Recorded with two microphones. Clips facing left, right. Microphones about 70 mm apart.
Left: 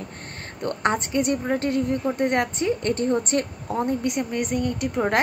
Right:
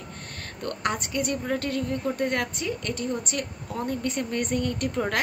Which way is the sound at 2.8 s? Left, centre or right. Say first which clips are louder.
Left 7 dB; left.